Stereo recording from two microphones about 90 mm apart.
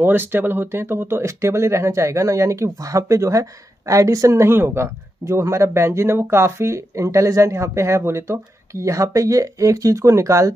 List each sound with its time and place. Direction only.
0.0 s speech: 25° right (ahead or behind)